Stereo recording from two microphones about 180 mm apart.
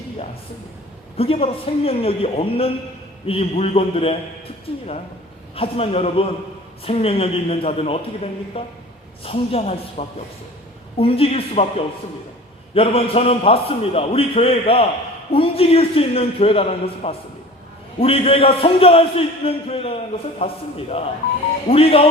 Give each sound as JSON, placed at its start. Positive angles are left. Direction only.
{"t": 1.1, "sound": "a man's voice", "side_deg": 30}
{"t": 5.5, "sound": "a man's voice", "side_deg": 35}
{"t": 12.7, "sound": "a man's voice", "side_deg": 30}